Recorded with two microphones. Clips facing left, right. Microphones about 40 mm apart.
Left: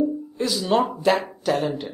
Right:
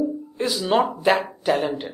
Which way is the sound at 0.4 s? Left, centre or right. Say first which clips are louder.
Right 1 dB; centre.